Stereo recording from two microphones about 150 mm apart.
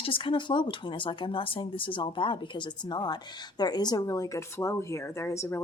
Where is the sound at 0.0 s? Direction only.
35° left (ahead or behind).